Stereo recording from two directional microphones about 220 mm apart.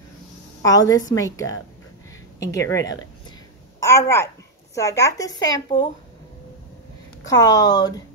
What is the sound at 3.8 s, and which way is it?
Speech, 15° left (ahead or behind).